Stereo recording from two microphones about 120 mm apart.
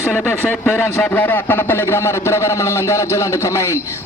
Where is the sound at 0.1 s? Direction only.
5° left (ahead or behind).